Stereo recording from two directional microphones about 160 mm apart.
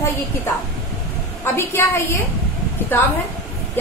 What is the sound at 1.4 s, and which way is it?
Speech, 15° left (ahead or behind).